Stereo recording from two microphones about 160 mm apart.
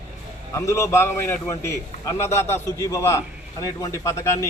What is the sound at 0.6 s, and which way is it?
A man's voice, 15° left (ahead or behind).